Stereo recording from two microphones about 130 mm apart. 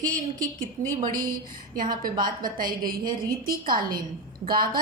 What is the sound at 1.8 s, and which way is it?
Speech, 90° right.